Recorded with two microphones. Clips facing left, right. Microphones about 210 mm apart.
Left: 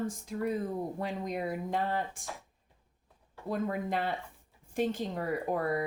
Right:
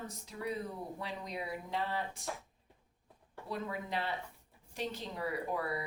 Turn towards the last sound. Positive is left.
turn(degrees=50)  # may be behind; listen again after turning